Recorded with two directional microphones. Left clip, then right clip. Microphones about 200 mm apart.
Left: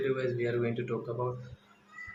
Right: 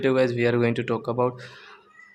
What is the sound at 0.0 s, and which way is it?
Speech, 50° right (ahead or behind).